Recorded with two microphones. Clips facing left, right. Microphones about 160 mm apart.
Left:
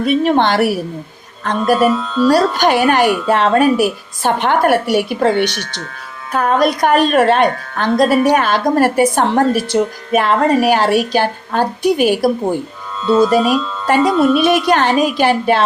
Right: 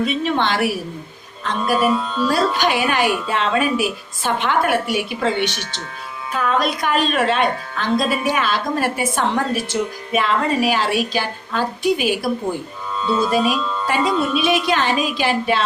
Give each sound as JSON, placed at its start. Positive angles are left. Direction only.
{"t": 0.0, "sound": "a woman's voice", "side_deg": 45}
{"t": 1.9, "sound": "speech", "side_deg": -10}
{"t": 2.3, "sound": "a woman's voice", "side_deg": 45}
{"t": 6.3, "sound": "a woman's voice", "side_deg": 45}
{"t": 13.3, "sound": "a woman's voice", "side_deg": 50}